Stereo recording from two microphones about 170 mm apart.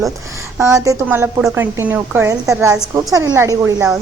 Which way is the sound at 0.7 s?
15° right (ahead or behind).